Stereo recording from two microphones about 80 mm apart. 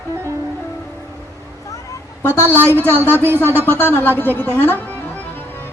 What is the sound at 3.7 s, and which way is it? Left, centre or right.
Speech, left.